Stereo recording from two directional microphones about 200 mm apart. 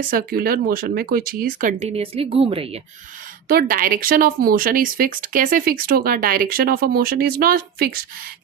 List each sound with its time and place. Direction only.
0.0 s speech: 45° right (ahead or behind); by 2.8 s 30° right (ahead or behind)
3.5 s speech: 45° right (ahead or behind)